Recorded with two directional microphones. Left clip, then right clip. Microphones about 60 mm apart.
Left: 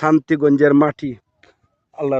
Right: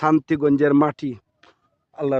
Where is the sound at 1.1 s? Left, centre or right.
Centre.